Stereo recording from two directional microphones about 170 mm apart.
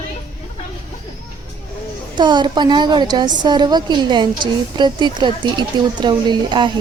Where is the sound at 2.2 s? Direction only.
25° right (ahead or behind).